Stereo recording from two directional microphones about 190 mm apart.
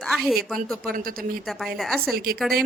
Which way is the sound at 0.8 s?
50° right (ahead or behind).